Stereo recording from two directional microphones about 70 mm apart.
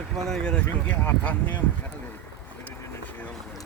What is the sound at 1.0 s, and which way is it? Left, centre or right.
Speech, left.